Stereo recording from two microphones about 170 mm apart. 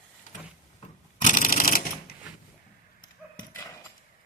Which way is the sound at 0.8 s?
50° left (ahead or behind).